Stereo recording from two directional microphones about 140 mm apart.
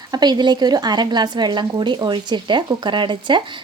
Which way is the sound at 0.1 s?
30° right (ahead or behind).